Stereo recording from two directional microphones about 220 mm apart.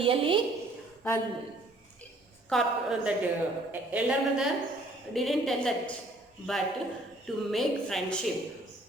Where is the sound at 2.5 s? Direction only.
Centre (ahead or behind).